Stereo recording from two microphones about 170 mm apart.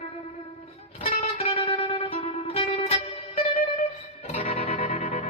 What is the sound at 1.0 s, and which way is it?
Music, 35° left (ahead or behind).